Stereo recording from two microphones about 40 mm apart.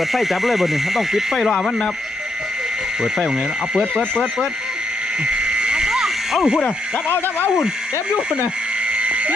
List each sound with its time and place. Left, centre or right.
0.1 s speech: centre
1.4 s speech: centre
4.1 s speech: left
5.2 s frog: right
7.1 s speech: left
9.0 s a sound: right